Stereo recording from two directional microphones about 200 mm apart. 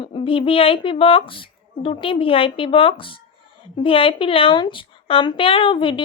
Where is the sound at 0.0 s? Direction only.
25° left (ahead or behind).